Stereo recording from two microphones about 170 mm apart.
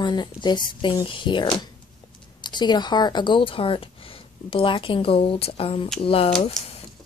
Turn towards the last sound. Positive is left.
turn(degrees=35)  # may be behind; listen again after turning